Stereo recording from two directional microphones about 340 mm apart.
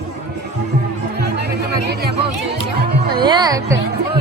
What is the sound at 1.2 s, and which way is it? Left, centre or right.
Music, right.